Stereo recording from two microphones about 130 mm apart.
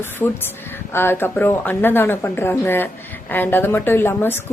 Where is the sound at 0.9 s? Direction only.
15° left (ahead or behind).